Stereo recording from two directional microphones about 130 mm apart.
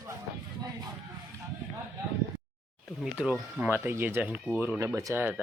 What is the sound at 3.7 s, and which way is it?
Speech, 20° right (ahead or behind).